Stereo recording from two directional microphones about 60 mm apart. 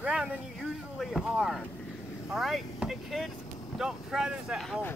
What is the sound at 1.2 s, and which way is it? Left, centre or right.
Speech, centre.